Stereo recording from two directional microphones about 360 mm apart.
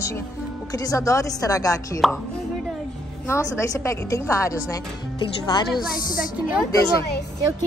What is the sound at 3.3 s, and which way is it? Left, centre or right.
A woman's voice, centre.